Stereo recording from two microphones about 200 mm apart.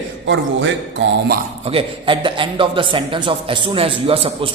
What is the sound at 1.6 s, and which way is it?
A man's voice, 30° right (ahead or behind).